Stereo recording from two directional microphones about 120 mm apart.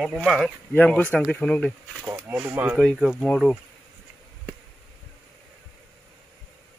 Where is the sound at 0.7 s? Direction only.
15° left (ahead or behind).